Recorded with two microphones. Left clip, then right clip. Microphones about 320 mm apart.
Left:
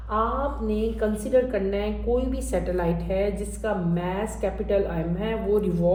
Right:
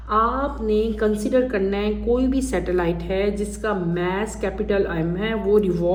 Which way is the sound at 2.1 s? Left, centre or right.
Right.